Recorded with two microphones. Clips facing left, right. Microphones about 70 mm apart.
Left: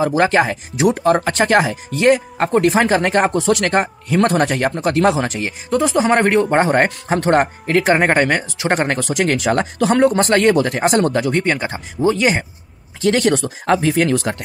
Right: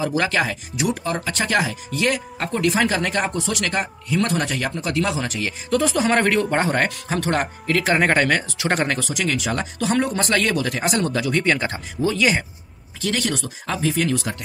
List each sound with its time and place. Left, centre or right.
0.0 s speech: left
5.7 s speech: left
10.2 s speech: left
11.4 s speech: centre
13.0 s speech: left